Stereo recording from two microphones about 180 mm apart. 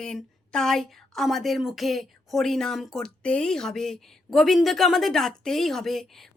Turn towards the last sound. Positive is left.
turn(degrees=0)  # may be behind; listen again after turning